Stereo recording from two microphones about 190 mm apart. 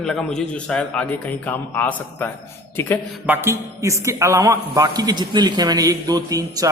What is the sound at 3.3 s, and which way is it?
A man's voice, 15° right (ahead or behind).